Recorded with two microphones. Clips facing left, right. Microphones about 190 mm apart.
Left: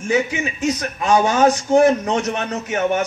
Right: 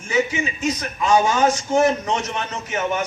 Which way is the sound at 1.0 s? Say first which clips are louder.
Left 2 dB; 60° left (ahead or behind).